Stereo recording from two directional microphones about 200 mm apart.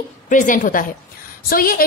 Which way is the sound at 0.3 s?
40° left (ahead or behind).